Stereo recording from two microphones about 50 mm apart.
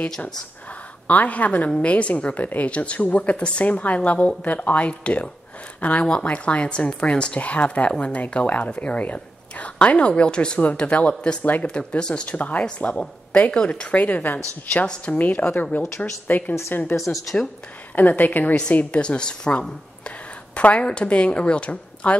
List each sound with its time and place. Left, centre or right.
1.0 s a woman's voice: left
12.4 s a woman's voice: left
14.0 s a woman's voice: left